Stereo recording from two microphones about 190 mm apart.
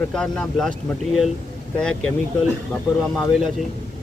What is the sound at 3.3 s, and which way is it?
Speech, centre (ahead or behind).